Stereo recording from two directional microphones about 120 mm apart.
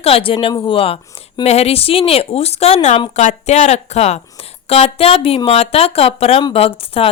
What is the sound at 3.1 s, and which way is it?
A woman's voice, 70° left (ahead or behind).